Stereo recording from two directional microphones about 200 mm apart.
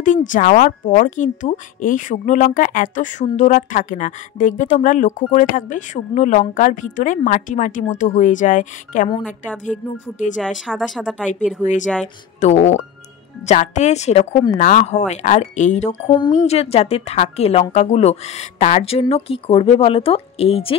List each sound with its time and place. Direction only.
0.0 s a woman's voice: 40° left (ahead or behind)
10.7 s speech: centre (ahead or behind)
11.6 s a woman's voice: 40° left (ahead or behind)
16.1 s a woman's voice: 25° left (ahead or behind)